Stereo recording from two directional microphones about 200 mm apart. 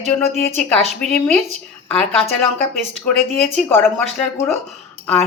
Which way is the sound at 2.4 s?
Centre (ahead or behind).